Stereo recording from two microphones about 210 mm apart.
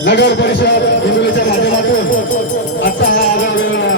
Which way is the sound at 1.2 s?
55° left (ahead or behind).